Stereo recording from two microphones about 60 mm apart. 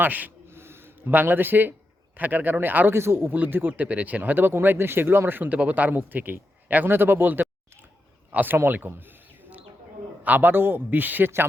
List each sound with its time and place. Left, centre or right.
0.0 s a man's voice: right
0.4 s gasp: right
2.1 s speech: right
3.3 s a man's voice: right
8.5 s a sound: right
10.2 s speech: right